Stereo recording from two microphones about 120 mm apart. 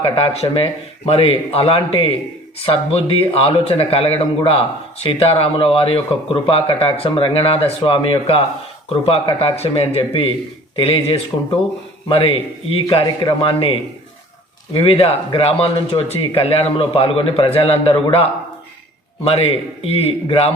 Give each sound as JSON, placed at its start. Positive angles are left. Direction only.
{"t": 0.0, "sound": "a man's voice", "side_deg": 55}
{"t": 19.2, "sound": "speech", "side_deg": 55}